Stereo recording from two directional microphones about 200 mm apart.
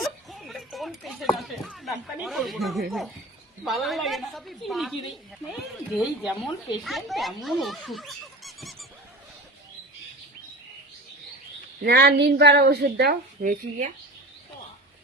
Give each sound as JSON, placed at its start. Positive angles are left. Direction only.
{"t": 0.0, "sound": "a sound", "side_deg": 0}
{"t": 1.4, "sound": "a woman's voice", "side_deg": 0}
{"t": 11.8, "sound": "a woman's voice", "side_deg": -55}